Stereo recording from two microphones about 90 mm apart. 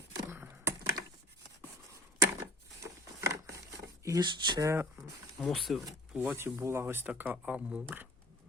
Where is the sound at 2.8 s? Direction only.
35° right (ahead or behind).